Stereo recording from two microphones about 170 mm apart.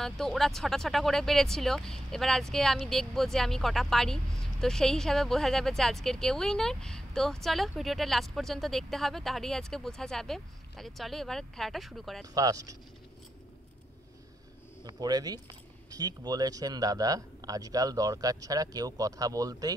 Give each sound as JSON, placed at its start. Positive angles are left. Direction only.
{"t": 0.0, "sound": "speech", "side_deg": 0}
{"t": 12.4, "sound": "speech", "side_deg": -20}
{"t": 14.9, "sound": "speech", "side_deg": -25}